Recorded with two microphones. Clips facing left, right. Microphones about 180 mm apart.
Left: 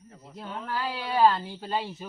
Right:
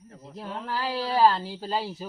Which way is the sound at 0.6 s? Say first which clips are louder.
Right 3 dB; 35° right (ahead or behind).